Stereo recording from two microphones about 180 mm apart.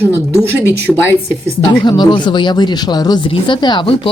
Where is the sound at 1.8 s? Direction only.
25° left (ahead or behind).